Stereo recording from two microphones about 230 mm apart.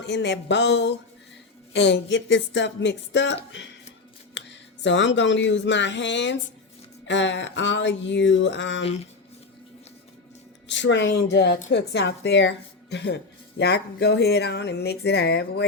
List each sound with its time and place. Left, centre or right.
0.0 s a woman's voice: left
10.7 s a woman's voice: left